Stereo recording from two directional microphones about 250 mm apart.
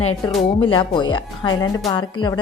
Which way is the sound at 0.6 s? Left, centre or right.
Centre.